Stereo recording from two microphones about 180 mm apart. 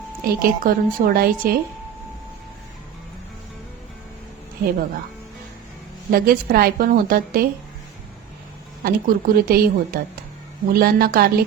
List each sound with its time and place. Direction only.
0.3 s a woman's voice: 55° right (ahead or behind)
6.1 s a woman's voice: 55° right (ahead or behind)
8.8 s a woman's voice: 55° right (ahead or behind)